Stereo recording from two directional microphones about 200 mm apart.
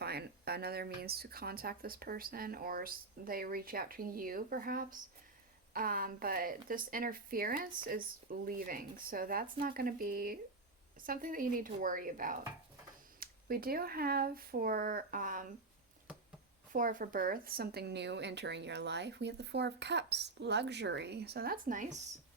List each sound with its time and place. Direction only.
0.0 s speech: 55° right (ahead or behind)
16.7 s a woman's voice: 40° right (ahead or behind)